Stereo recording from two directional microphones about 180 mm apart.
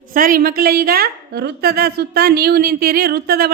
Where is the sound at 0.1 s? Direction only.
50° right (ahead or behind).